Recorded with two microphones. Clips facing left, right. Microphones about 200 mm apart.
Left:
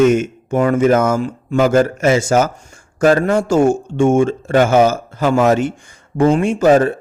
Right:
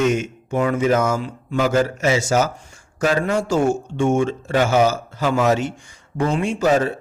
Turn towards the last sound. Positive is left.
turn(degrees=50)  # may be behind; listen again after turning